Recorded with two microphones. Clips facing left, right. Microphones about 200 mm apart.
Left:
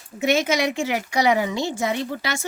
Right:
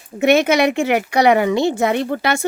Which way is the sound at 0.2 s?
65° right (ahead or behind).